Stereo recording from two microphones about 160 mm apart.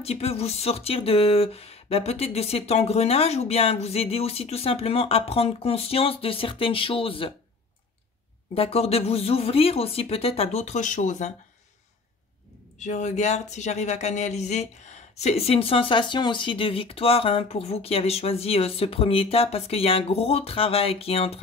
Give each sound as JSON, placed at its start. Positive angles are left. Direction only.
{"t": 0.0, "sound": "speech", "side_deg": 40}
{"t": 8.5, "sound": "speech", "side_deg": 40}
{"t": 12.7, "sound": "speech", "side_deg": 50}